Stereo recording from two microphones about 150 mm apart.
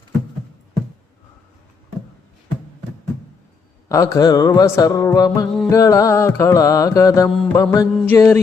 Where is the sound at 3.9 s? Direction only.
20° left (ahead or behind).